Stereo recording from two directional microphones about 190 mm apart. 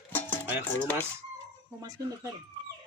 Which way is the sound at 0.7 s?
10° left (ahead or behind).